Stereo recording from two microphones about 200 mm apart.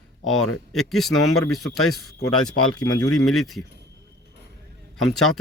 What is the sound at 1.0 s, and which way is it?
A man's voice, 90° left.